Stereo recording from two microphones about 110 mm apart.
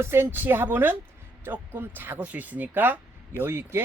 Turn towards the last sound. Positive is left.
turn(degrees=-20)  # may be behind; listen again after turning